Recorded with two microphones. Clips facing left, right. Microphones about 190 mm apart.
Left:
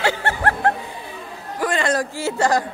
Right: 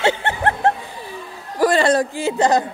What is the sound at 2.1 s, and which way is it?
Speech, 20° right (ahead or behind).